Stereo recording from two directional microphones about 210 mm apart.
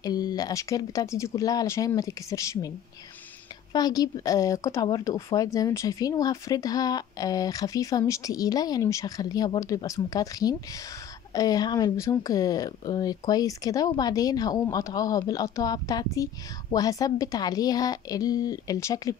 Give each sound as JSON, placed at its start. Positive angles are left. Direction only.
{"t": 0.0, "sound": "speech", "side_deg": 20}
{"t": 3.7, "sound": "speech", "side_deg": 20}